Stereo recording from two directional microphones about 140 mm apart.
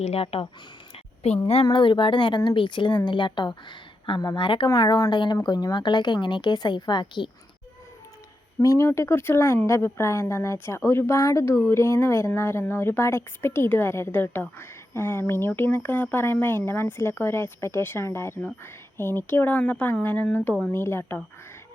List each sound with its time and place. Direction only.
0.0 s speech: 45° left (ahead or behind)
0.9 s a sound: 50° left (ahead or behind)
1.6 s speech: 35° left (ahead or behind)
8.6 s speech: 20° left (ahead or behind)